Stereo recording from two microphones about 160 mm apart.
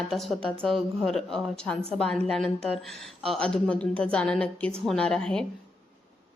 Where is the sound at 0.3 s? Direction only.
35° right (ahead or behind).